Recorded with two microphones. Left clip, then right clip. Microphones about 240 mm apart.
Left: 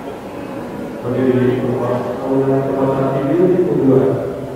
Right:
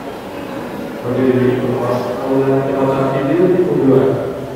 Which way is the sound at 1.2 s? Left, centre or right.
Centre.